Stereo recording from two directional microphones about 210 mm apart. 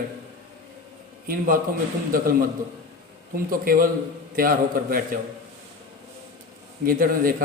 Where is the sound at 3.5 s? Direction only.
45° right (ahead or behind).